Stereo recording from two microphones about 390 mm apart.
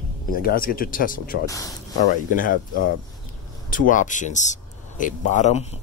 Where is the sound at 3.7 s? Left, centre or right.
Centre.